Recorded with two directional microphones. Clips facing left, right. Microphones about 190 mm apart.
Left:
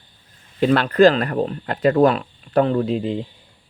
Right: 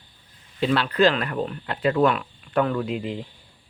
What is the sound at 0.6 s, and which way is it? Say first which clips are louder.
Speech: left 6 dB; 50° left (ahead or behind).